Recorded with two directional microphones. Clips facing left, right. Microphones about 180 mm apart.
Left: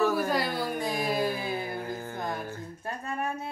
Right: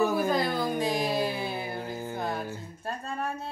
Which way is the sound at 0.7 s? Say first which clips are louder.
Right 2 dB; 20° right (ahead or behind).